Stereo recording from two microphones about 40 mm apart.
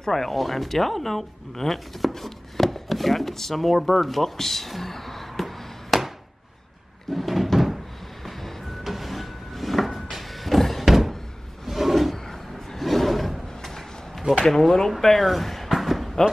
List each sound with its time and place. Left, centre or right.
0.0 s speech: centre
7.1 s cupboard open or close: centre
8.3 s vehicle: centre
8.8 s music: centre
10.9 s a sound: centre
14.4 s speech: centre
15.7 s a sound: centre